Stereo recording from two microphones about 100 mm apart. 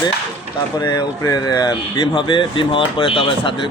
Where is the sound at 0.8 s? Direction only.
40° left (ahead or behind).